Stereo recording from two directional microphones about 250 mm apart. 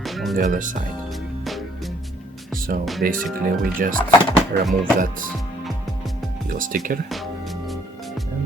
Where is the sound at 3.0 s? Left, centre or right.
Right.